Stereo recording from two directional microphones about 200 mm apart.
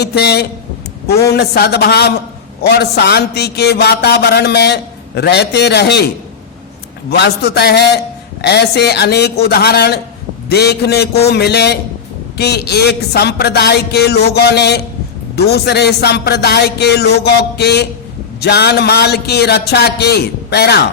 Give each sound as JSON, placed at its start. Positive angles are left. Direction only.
{"t": 0.0, "sound": "a man's voice", "side_deg": 55}
{"t": 7.1, "sound": "a man's voice", "side_deg": 55}